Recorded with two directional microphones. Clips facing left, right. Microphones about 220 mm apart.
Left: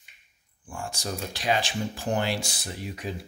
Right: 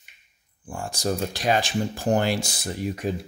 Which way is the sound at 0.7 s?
35° right (ahead or behind).